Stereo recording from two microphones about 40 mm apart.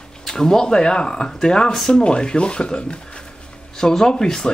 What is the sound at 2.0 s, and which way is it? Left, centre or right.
Speech, left.